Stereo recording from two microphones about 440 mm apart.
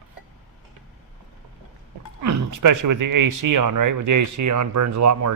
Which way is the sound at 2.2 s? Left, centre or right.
Right.